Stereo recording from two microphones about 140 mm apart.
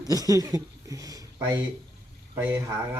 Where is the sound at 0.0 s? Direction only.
25° right (ahead or behind).